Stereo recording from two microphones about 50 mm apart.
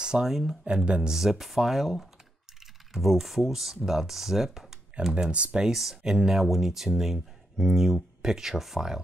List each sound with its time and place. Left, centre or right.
0.0 s a sound: centre
0.3 s speech: centre
0.8 s speech: right
1.1 s speech: centre
5.0 s speech: right
5.7 s speech: centre